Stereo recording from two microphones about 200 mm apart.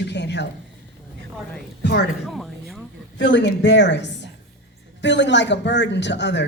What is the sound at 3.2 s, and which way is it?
A man's voice, 65° left (ahead or behind).